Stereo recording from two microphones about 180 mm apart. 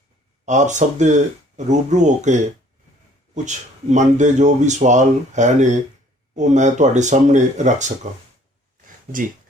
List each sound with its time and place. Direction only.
0.4 s speech: 40° right (ahead or behind)